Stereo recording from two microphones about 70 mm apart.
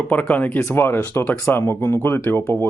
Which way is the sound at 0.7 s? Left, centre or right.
Left.